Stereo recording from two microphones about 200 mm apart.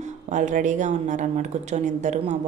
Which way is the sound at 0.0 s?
40° right (ahead or behind).